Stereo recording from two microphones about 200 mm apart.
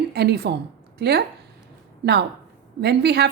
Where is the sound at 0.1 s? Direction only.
55° right (ahead or behind).